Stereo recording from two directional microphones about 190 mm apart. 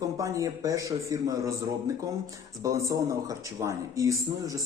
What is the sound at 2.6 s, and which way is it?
Speech, 15° right (ahead or behind).